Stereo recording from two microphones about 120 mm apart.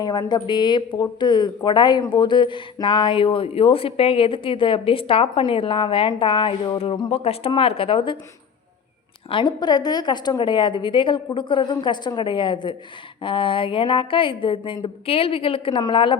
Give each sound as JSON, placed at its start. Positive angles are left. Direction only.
{"t": 0.0, "sound": "speech", "side_deg": 35}
{"t": 7.1, "sound": "speech", "side_deg": 55}
{"t": 9.3, "sound": "a woman's voice", "side_deg": 40}